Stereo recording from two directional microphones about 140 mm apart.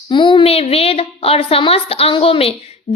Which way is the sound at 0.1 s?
35° left (ahead or behind).